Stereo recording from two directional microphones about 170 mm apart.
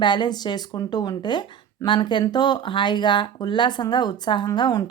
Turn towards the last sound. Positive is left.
turn(degrees=25)  # may be behind; listen again after turning